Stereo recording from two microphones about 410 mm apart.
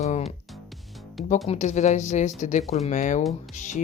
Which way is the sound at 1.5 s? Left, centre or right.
Centre.